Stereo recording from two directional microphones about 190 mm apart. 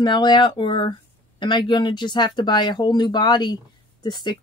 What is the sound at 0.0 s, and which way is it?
Speech, 25° left (ahead or behind).